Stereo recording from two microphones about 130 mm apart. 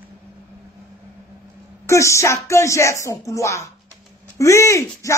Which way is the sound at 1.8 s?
25° left (ahead or behind).